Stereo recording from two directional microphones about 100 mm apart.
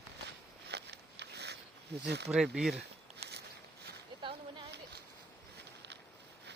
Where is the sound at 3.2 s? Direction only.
90° right.